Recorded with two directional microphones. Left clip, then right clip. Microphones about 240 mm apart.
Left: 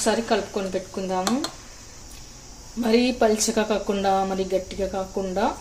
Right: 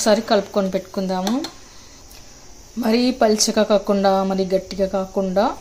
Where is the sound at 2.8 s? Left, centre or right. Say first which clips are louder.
Right 3 dB; right.